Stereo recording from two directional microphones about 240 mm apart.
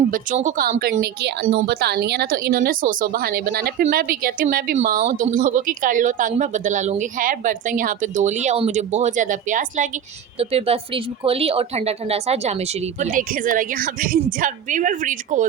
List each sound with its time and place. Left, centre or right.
0.1 s a woman's voice: right